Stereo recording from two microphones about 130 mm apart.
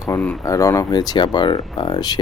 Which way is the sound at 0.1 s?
20° left (ahead or behind).